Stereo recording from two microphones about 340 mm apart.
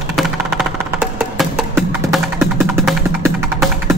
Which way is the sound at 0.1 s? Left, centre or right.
Centre.